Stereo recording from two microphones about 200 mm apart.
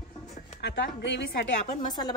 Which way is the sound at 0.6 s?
60° left (ahead or behind).